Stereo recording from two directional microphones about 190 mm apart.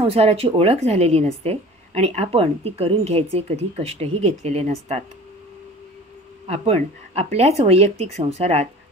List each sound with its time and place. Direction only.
0.0 s a woman's voice: 35° right (ahead or behind)
6.4 s a woman's voice: 30° right (ahead or behind)